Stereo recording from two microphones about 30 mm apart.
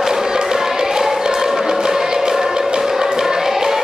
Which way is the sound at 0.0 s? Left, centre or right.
Centre.